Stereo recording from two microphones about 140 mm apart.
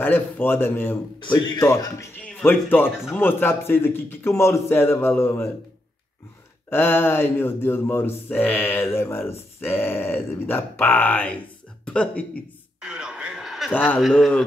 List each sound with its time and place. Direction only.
0.0 s speech: 15° left (ahead or behind)
1.2 s speech: 30° left (ahead or behind)
1.6 s speech: 20° left (ahead or behind)
6.7 s speech: 15° left (ahead or behind)
12.8 s a sound: 5° right (ahead or behind)
13.7 s speech: 10° left (ahead or behind)
13.9 s a man's voice: centre (ahead or behind)